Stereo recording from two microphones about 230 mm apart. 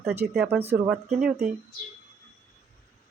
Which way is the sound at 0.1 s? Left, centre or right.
Centre.